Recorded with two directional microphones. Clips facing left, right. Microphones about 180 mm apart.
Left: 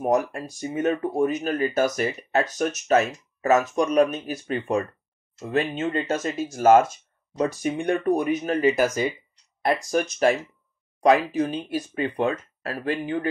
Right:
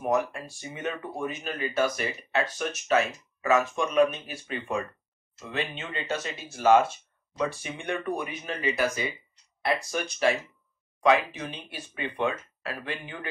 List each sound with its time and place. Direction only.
0.0 s speech: 40° left (ahead or behind)